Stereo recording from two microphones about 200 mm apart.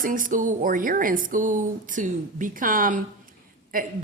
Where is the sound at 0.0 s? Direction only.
40° right (ahead or behind).